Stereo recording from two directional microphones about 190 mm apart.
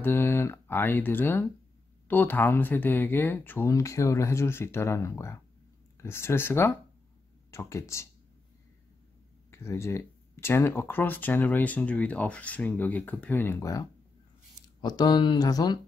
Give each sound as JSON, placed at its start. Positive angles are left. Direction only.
{"t": 0.0, "sound": "speech", "side_deg": 10}
{"t": 9.5, "sound": "speech", "side_deg": 15}